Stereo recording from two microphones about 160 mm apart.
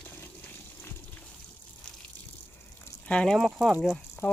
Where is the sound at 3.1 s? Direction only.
5° left (ahead or behind).